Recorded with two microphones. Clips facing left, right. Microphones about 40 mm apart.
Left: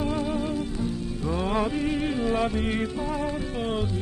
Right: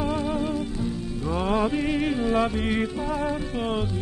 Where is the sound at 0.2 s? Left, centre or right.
Centre.